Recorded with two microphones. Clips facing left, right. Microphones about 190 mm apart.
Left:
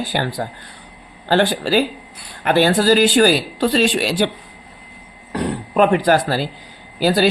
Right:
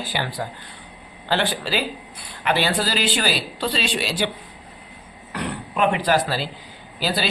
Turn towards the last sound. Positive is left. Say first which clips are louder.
# left 9 dB
turn(degrees=45)  # may be behind; listen again after turning